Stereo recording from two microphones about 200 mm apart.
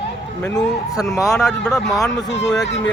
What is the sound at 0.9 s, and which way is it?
A man's voice, centre (ahead or behind).